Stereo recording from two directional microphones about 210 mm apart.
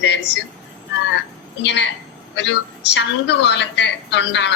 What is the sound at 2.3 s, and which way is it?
A woman's voice, 55° left (ahead or behind).